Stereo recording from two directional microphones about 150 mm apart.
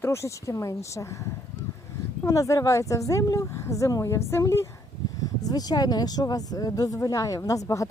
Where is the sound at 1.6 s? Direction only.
25° left (ahead or behind).